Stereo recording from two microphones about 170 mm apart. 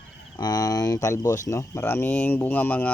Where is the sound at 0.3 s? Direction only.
25° left (ahead or behind).